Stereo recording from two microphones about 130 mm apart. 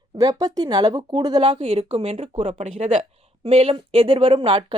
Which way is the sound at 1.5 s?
50° right (ahead or behind).